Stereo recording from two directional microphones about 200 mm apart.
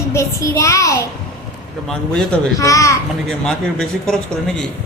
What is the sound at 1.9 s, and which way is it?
Speech, 5° left (ahead or behind).